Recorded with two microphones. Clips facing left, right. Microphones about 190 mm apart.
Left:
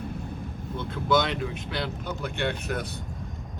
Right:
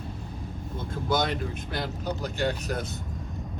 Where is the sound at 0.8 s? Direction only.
45° right (ahead or behind).